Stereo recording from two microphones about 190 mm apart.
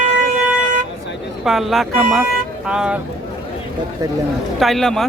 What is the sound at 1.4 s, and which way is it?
Speech, centre (ahead or behind).